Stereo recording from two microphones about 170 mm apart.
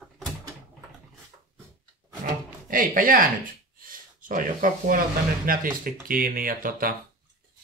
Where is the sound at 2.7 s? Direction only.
55° right (ahead or behind).